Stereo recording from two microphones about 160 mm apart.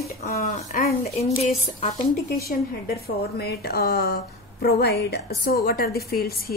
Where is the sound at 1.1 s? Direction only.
40° left (ahead or behind).